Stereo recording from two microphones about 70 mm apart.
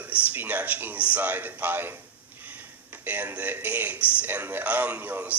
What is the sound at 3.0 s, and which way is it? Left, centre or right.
Speech, right.